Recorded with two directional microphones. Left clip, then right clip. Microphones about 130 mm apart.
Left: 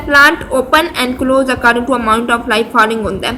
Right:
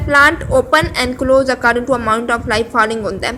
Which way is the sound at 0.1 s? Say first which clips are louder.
Left 2 dB; 30° right (ahead or behind).